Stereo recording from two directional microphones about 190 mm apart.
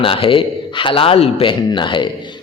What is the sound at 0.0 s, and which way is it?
A man's voice, 30° left (ahead or behind).